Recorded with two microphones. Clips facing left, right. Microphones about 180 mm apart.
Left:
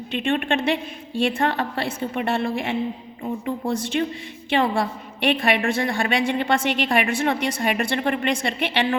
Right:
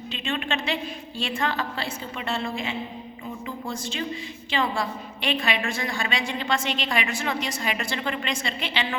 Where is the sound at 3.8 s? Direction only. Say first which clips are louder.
Left 6 dB; 60° left (ahead or behind).